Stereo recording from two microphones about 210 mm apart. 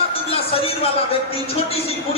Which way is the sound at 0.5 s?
25° left (ahead or behind).